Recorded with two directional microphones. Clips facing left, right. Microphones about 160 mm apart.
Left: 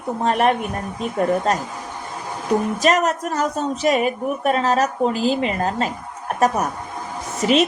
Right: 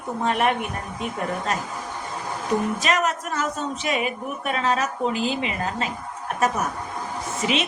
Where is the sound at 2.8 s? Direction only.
40° left (ahead or behind).